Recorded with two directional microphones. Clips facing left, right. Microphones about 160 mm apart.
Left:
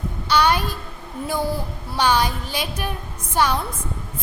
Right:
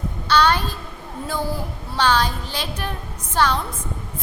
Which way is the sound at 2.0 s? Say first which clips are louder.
Even; 15° left (ahead or behind).